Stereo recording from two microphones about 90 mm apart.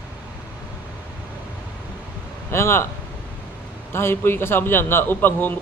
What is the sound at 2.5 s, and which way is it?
Speech, 30° left (ahead or behind).